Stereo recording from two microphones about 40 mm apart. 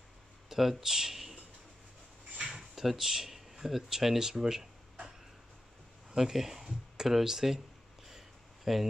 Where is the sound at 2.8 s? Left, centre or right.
Centre.